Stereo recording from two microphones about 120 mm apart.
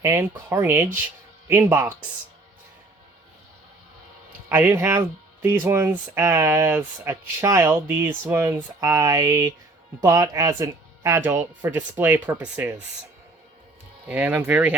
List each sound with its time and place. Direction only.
0.0 s speech: 25° right (ahead or behind)
4.4 s speech: 20° right (ahead or behind)
14.1 s speech: 15° right (ahead or behind)